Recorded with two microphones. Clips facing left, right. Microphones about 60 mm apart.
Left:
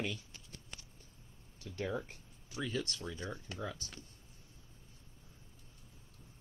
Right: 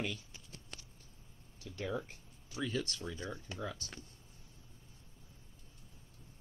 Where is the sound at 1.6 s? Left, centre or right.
Left.